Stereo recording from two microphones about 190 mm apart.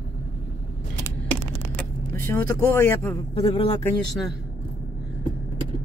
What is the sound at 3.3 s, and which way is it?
Speech, 30° left (ahead or behind).